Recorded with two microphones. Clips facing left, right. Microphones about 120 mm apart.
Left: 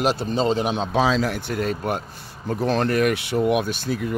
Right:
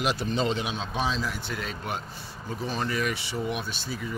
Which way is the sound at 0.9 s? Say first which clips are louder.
Left 9 dB; 90° left.